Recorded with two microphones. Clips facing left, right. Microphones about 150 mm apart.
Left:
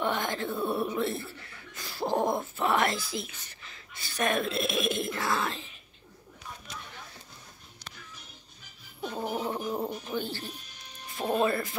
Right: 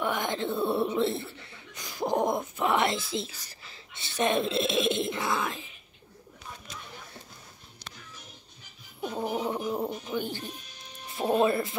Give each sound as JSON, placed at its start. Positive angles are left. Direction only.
{"t": 0.0, "sound": "music", "side_deg": -10}
{"t": 0.3, "sound": "music", "side_deg": -20}
{"t": 0.7, "sound": "a sound", "side_deg": -25}
{"t": 9.0, "sound": "fowl", "side_deg": -10}
{"t": 10.0, "sound": "speech", "side_deg": -15}